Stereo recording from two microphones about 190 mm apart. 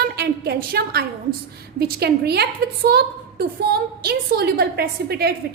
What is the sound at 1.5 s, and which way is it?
A woman's voice, 55° right (ahead or behind).